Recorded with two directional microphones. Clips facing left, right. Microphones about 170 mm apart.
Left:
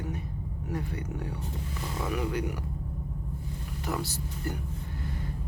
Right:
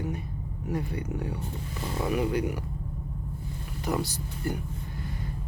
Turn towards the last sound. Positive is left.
turn(degrees=-15)  # may be behind; listen again after turning